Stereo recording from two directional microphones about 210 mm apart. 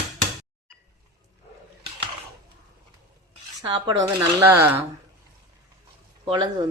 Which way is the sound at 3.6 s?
20° right (ahead or behind).